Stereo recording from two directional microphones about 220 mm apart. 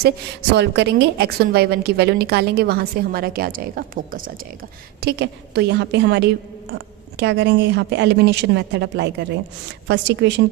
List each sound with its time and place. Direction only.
0.5 s a woman's voice: 50° right (ahead or behind)